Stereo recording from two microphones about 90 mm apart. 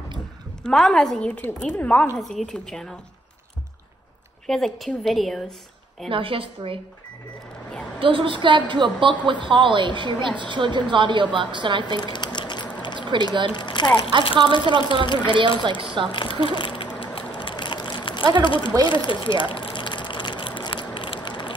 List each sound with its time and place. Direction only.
0.7 s a woman's voice: 5° left (ahead or behind)
2.1 s a woman's voice: 5° left (ahead or behind)
4.5 s a woman's voice: 5° left (ahead or behind)
6.0 s a woman's voice: 75° right (ahead or behind)
8.0 s speech: 70° right (ahead or behind)
12.0 s a sound: 55° left (ahead or behind)
13.1 s speech: 60° right (ahead or behind)
13.5 s speech: 60° left (ahead or behind)
14.3 s speech: 60° right (ahead or behind)
14.8 s speech: 65° left (ahead or behind)
15.2 s speech: 60° right (ahead or behind)
16.1 s a sound: 75° left (ahead or behind)
18.4 s speech: 60° left (ahead or behind)
18.9 s a sound: 65° left (ahead or behind)